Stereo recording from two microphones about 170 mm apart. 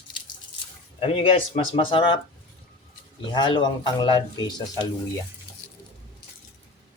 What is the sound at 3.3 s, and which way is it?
Speech, 25° left (ahead or behind).